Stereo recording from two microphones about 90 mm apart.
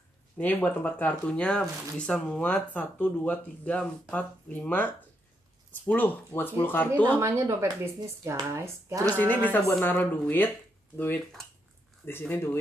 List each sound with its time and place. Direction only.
0.4 s speech: 20° left (ahead or behind)
7.2 s speech: 35° right (ahead or behind)
9.1 s speech: 20° left (ahead or behind)
12.1 s speech: 25° left (ahead or behind)